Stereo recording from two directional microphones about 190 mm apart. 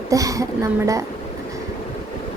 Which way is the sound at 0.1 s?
15° right (ahead or behind).